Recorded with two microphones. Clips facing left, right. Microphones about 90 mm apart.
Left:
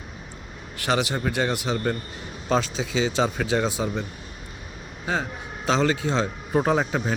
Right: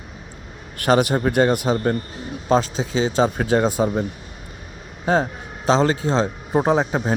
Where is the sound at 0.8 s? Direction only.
45° right (ahead or behind).